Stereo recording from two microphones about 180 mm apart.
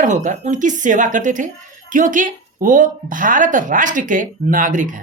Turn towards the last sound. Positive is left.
turn(degrees=-45)  # may be behind; listen again after turning